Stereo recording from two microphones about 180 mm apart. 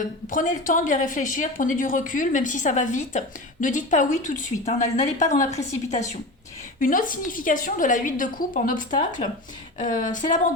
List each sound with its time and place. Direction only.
0.3 s a woman's voice: 45° left (ahead or behind)
6.7 s a woman's voice: 50° left (ahead or behind)